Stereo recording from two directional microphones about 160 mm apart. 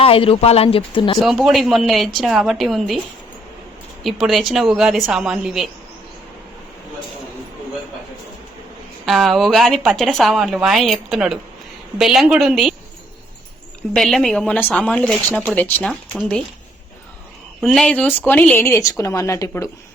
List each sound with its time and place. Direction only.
0.0 s speech: 35° left (ahead or behind)
1.2 s speech: centre (ahead or behind)
4.0 s speech: centre (ahead or behind)
9.0 s speech: centre (ahead or behind)
13.9 s speech: centre (ahead or behind)
17.6 s a woman's voice: centre (ahead or behind); by 19.7 s 20° left (ahead or behind)